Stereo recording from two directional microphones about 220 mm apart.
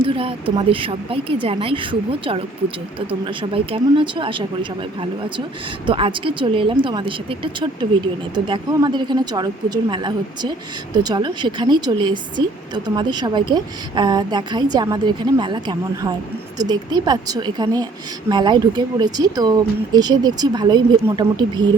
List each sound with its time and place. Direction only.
0.0 s speech: 25° right (ahead or behind)
5.8 s speech: 20° right (ahead or behind)